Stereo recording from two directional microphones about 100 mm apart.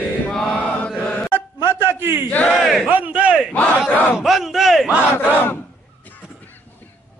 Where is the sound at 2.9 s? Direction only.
15° right (ahead or behind).